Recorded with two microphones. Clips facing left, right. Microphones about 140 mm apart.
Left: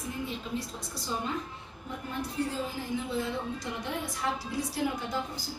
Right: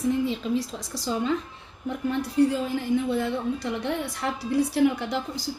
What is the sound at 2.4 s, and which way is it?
A woman's voice, 70° right (ahead or behind).